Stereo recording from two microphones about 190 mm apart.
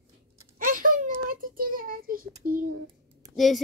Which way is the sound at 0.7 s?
45° right (ahead or behind).